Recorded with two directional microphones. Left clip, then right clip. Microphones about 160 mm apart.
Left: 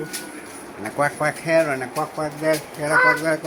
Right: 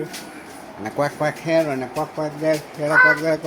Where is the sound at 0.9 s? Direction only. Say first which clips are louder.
Left 1 dB; 25° right (ahead or behind).